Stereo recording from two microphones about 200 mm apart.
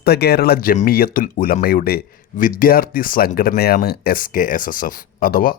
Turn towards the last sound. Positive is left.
turn(degrees=45)  # may be behind; listen again after turning